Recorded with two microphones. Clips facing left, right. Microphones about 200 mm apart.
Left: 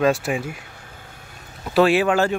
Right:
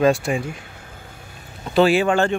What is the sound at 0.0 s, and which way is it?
Speech, 5° left (ahead or behind).